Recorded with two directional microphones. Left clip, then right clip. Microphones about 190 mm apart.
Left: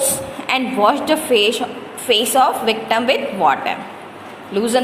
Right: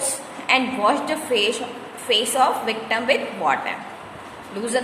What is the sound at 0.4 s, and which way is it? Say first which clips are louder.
A woman's voice: left 3 dB; 20° left (ahead or behind).